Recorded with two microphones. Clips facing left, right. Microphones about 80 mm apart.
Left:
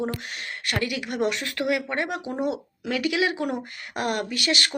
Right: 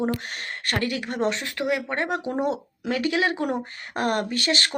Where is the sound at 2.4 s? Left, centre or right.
Right.